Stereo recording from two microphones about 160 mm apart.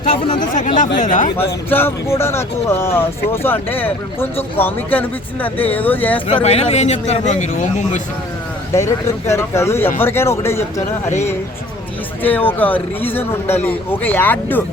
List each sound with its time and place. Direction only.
0.4 s a man's voice: 55° left (ahead or behind)
1.7 s speech: 15° left (ahead or behind)
6.2 s a man's voice: 40° left (ahead or behind)
8.7 s speech: 20° left (ahead or behind)
12.2 s speech: 10° left (ahead or behind)